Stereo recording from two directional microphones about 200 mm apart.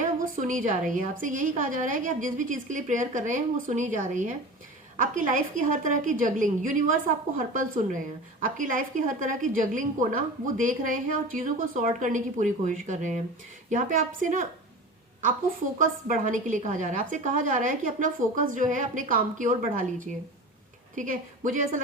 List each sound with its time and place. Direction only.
0.2 s a woman's voice: 40° right (ahead or behind)
15.8 s a woman's voice: 40° right (ahead or behind)